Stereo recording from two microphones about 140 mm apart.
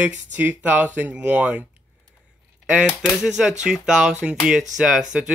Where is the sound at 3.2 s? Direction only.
5° right (ahead or behind).